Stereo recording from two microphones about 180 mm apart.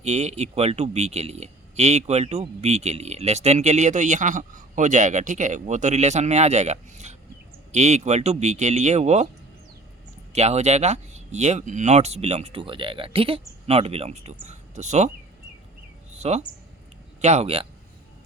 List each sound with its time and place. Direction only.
0.0 s speech: 35° right (ahead or behind)
10.3 s speech: 35° right (ahead or behind)
16.1 s speech: 40° right (ahead or behind)